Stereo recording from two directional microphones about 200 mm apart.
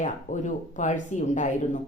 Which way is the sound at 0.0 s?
35° left (ahead or behind).